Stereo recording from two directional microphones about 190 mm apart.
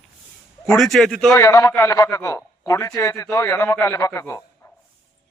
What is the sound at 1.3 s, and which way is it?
Speech, 15° left (ahead or behind).